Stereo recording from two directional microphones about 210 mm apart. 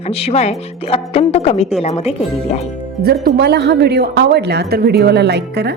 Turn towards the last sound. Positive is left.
turn(degrees=-50)  # may be behind; listen again after turning